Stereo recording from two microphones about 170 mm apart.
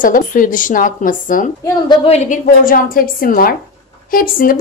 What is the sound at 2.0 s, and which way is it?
A woman's voice, 40° left (ahead or behind).